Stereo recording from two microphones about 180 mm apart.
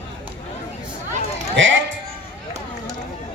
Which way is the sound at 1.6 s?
90° right.